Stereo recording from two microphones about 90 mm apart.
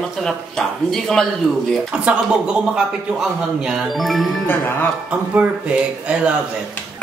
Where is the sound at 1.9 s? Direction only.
10° right (ahead or behind).